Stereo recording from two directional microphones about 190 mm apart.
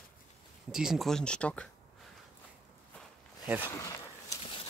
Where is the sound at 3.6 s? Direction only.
15° left (ahead or behind).